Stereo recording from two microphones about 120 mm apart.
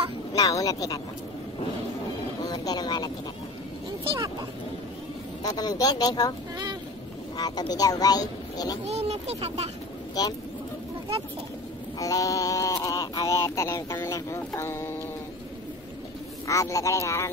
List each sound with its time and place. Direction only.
0.3 s speech: 30° left (ahead or behind)
2.4 s vehicle: 30° left (ahead or behind)
5.4 s speech: 30° left (ahead or behind)
7.3 s speech: 35° left (ahead or behind)
8.8 s speech: 65° right (ahead or behind)
10.2 s speech: 35° left (ahead or behind)
12.0 s a sound: 30° left (ahead or behind)
16.4 s a sound: 25° left (ahead or behind)